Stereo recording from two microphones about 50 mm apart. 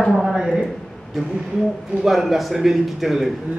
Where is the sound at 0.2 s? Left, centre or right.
Centre.